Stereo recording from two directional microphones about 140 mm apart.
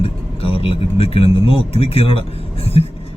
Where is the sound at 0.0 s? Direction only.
45° left (ahead or behind).